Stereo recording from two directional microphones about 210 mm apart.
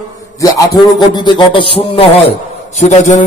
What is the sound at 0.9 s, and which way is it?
A man's voice, 20° left (ahead or behind).